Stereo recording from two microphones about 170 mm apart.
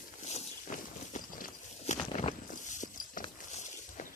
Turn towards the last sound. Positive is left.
turn(degrees=50)  # may be behind; listen again after turning